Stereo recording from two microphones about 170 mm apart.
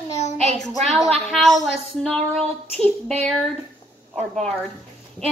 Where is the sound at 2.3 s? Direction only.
35° right (ahead or behind).